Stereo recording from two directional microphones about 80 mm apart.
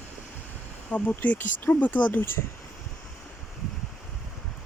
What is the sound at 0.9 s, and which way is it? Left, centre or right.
Speech, left.